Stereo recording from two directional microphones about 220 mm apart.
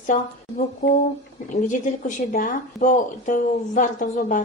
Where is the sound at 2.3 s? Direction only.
35° left (ahead or behind).